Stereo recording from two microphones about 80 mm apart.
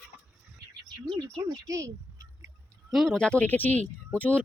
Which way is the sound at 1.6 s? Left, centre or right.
Right.